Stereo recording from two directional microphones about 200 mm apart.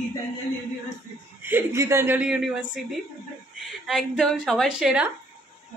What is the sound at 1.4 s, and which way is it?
Speech, 10° right (ahead or behind).